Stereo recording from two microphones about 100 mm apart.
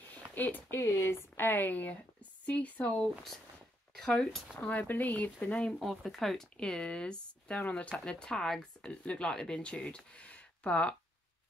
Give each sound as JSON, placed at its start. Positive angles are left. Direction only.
{"t": 0.3, "sound": "speech", "side_deg": 20}
{"t": 4.6, "sound": "speech", "side_deg": 15}
{"t": 5.8, "sound": "speech", "side_deg": 0}